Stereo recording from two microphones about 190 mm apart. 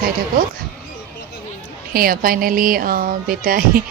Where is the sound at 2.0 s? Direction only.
50° right (ahead or behind).